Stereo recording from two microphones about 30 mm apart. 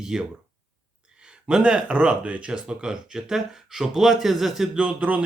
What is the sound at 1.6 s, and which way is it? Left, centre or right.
Speech, right.